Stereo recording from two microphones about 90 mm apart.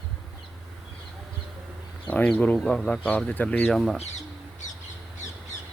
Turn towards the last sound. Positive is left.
turn(degrees=0)  # may be behind; listen again after turning